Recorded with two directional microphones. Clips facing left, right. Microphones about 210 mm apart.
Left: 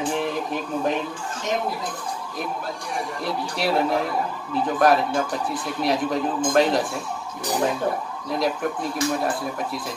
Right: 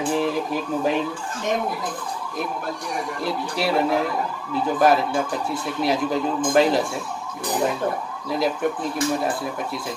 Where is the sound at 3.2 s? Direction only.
Centre (ahead or behind).